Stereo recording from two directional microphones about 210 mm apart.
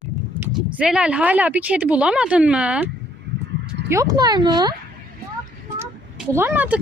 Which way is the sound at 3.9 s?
15° right (ahead or behind).